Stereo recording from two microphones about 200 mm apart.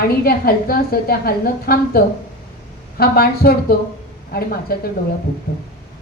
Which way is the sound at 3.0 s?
50° left (ahead or behind).